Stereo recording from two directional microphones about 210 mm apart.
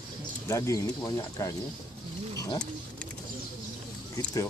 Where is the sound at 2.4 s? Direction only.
20° left (ahead or behind).